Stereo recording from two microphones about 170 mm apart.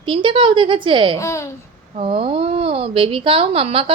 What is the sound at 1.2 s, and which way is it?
Speech, 15° left (ahead or behind).